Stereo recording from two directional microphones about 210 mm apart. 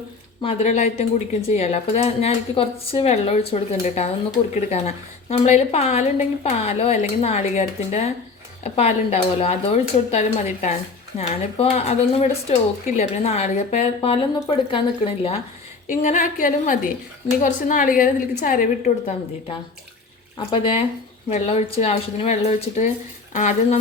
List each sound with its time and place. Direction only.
0.4 s a woman's voice: 30° left (ahead or behind)
15.9 s speech: 35° left (ahead or behind)
20.5 s a woman's voice: 25° left (ahead or behind)